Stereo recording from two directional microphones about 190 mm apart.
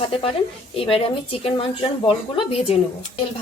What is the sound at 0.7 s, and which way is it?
A woman's voice, 30° left (ahead or behind).